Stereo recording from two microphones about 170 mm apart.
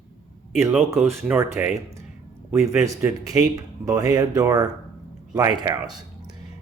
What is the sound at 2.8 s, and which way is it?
Speech, 15° right (ahead or behind).